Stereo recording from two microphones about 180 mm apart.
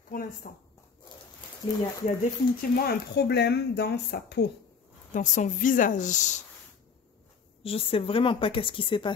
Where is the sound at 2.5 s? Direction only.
60° left (ahead or behind).